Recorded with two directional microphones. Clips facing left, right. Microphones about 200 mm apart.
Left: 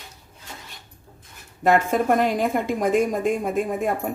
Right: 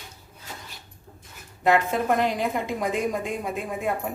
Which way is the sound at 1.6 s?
45° left (ahead or behind).